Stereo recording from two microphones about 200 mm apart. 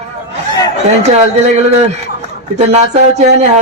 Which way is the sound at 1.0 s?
35° right (ahead or behind).